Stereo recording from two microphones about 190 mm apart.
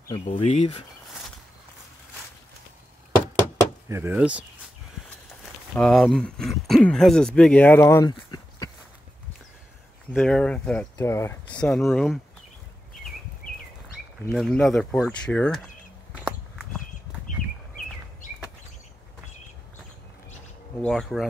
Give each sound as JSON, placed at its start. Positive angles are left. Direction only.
{"t": 0.3, "sound": "speech", "side_deg": 30}
{"t": 3.9, "sound": "speech", "side_deg": -10}
{"t": 8.1, "sound": "a sound", "side_deg": 20}
{"t": 10.1, "sound": "speech", "side_deg": 5}
{"t": 14.3, "sound": "speech", "side_deg": 0}
{"t": 16.1, "sound": "walk", "side_deg": -5}
{"t": 20.8, "sound": "speech", "side_deg": 0}